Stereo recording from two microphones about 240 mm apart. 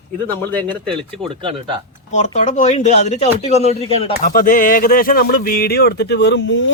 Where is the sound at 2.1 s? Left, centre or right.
Left.